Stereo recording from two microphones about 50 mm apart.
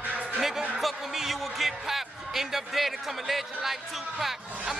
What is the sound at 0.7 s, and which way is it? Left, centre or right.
Speech, centre.